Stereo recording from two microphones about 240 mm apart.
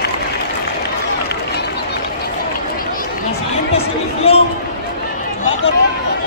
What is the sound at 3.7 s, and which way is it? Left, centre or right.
Chatter, left.